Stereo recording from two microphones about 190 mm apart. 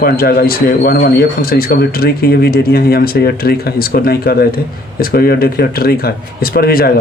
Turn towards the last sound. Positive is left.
turn(degrees=50)  # may be behind; listen again after turning